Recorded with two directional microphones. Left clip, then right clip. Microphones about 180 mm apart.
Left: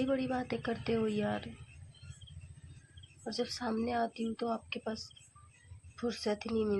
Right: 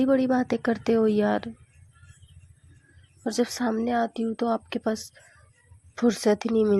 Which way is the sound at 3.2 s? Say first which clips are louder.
Right 10 dB; 40° right (ahead or behind).